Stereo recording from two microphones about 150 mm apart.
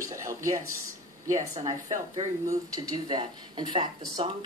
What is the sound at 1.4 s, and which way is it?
Speech, 40° right (ahead or behind).